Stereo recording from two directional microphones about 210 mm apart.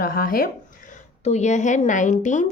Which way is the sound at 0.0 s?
45° left (ahead or behind).